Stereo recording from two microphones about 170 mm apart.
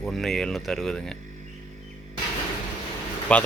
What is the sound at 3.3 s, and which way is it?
Speech, 5° left (ahead or behind).